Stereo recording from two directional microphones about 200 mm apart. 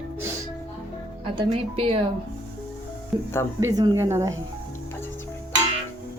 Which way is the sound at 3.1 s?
20° right (ahead or behind).